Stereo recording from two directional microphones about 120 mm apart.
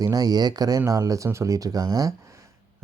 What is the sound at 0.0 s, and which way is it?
Speech, 30° right (ahead or behind).